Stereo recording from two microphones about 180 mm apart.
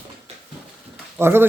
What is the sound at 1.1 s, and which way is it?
Speech, 10° right (ahead or behind).